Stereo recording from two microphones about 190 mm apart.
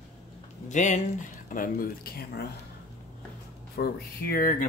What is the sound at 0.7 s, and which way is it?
Speech, 40° left (ahead or behind).